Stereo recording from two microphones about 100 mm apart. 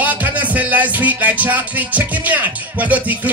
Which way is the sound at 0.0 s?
15° right (ahead or behind).